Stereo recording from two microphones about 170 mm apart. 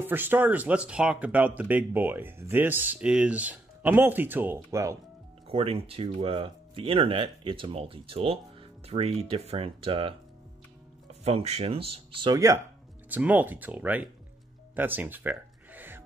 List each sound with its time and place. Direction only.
0.0 s speech: 10° right (ahead or behind)
5.5 s speech: 35° right (ahead or behind); by 14.0 s 10° right (ahead or behind)
14.8 s a sound: 10° right (ahead or behind)